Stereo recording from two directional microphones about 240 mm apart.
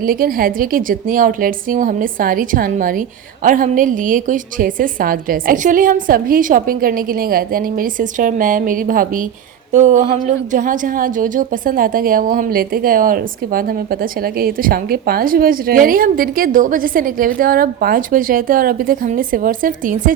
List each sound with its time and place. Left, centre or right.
0.0 s a woman's voice: right